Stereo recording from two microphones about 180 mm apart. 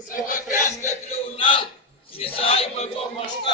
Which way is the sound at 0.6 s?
40° left (ahead or behind).